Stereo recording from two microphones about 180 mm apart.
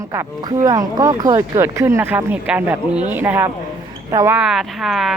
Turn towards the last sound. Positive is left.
turn(degrees=0)  # may be behind; listen again after turning